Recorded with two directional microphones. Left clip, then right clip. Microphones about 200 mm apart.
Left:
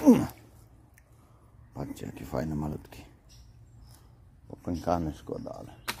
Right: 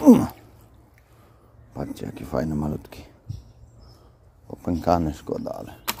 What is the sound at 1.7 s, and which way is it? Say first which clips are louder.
Speech: right 7 dB; 10° right (ahead or behind).